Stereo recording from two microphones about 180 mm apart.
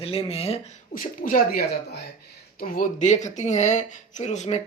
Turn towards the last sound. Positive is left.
turn(degrees=40)  # may be behind; listen again after turning